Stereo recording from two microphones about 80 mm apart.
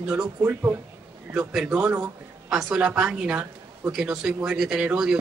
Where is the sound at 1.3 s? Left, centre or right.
Centre.